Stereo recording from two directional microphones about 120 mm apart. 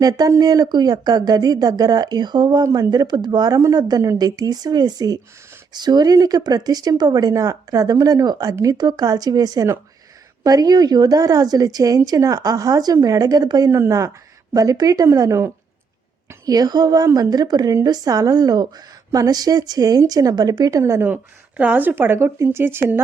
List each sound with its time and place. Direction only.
0.0 s speech: 30° right (ahead or behind)